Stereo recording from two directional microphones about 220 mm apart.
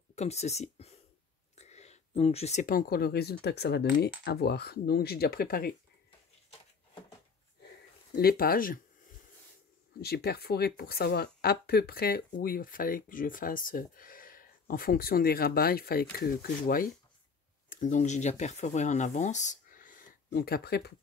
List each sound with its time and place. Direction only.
0.1 s speech: 30° left (ahead or behind)
8.2 s speech: 45° left (ahead or behind)
9.9 s speech: 45° left (ahead or behind)